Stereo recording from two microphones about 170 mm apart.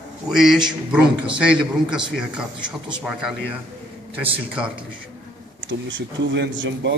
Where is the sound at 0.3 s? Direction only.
Centre (ahead or behind).